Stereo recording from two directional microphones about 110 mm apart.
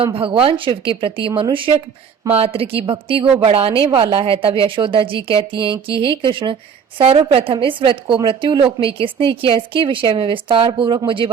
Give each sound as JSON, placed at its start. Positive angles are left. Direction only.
{"t": 0.0, "sound": "a woman's voice", "side_deg": -55}